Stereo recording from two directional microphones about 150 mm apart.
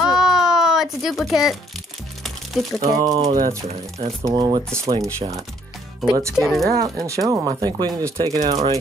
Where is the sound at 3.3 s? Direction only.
75° right (ahead or behind).